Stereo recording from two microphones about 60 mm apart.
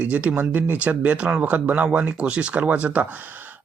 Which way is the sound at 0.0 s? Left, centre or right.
Right.